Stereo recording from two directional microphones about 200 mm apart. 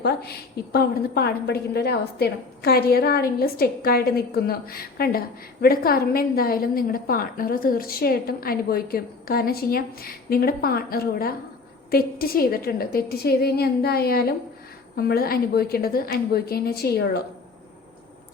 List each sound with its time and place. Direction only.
0.0 s a woman's voice: 50° left (ahead or behind)